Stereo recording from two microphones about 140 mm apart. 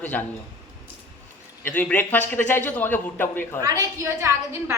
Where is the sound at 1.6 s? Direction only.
10° left (ahead or behind).